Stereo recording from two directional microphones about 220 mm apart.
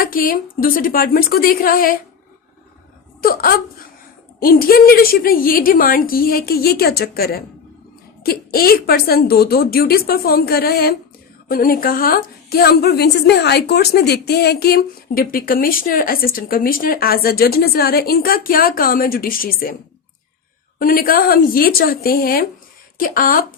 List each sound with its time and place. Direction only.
0.0 s a woman's voice: 40° left (ahead or behind)
3.2 s a woman's voice: 40° left (ahead or behind)
20.7 s a woman's voice: 40° left (ahead or behind)